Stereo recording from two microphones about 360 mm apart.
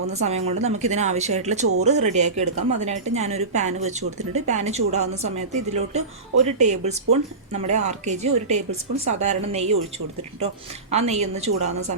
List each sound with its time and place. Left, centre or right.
0.1 s a woman's voice: centre
10.9 s a woman's voice: centre